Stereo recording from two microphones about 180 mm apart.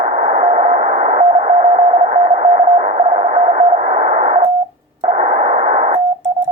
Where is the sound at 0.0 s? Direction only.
45° right (ahead or behind).